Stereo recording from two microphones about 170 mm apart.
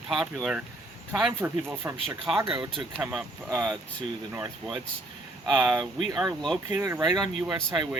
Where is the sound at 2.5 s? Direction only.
30° right (ahead or behind).